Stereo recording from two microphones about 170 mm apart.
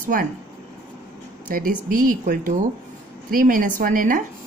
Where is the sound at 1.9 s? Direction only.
55° right (ahead or behind).